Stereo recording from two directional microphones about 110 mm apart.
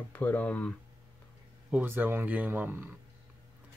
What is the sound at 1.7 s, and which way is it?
Speech, 15° right (ahead or behind).